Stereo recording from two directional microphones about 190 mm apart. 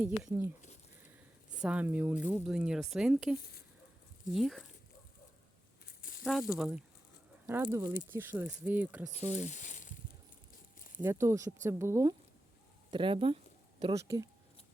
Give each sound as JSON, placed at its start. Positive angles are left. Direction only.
{"t": 0.0, "sound": "speech", "side_deg": -10}
{"t": 1.6, "sound": "speech", "side_deg": -5}
{"t": 4.4, "sound": "speech", "side_deg": 0}
{"t": 5.8, "sound": "a sound", "side_deg": 50}
{"t": 6.5, "sound": "speech", "side_deg": 0}
{"t": 9.3, "sound": "a sound", "side_deg": 40}
{"t": 11.0, "sound": "speech", "side_deg": -15}
{"t": 12.9, "sound": "a sound", "side_deg": -25}
{"t": 13.9, "sound": "speech", "side_deg": -15}